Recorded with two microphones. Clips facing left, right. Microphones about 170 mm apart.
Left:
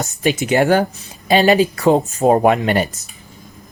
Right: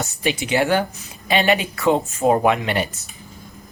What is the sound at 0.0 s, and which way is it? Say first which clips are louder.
Speech: left 5 dB; 45° left (ahead or behind).